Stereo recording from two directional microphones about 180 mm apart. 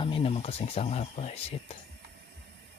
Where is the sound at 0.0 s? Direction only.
30° left (ahead or behind).